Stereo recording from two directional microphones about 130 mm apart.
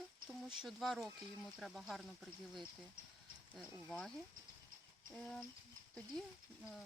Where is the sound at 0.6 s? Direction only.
Centre (ahead or behind).